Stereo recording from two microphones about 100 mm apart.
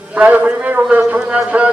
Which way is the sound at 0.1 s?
15° right (ahead or behind).